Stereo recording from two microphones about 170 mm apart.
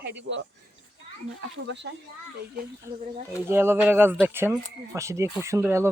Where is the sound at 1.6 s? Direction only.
90° right.